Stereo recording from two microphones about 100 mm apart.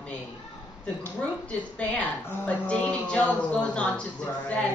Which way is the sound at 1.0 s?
15° left (ahead or behind).